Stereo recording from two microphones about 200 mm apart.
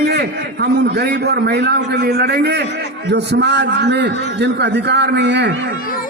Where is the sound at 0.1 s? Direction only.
55° right (ahead or behind).